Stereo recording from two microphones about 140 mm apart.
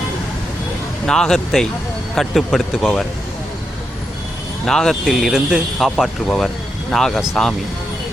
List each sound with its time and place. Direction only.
1.0 s speech: 5° left (ahead or behind)
4.6 s speech: 5° left (ahead or behind)